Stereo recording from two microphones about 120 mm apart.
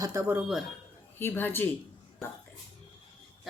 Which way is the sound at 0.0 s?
25° right (ahead or behind).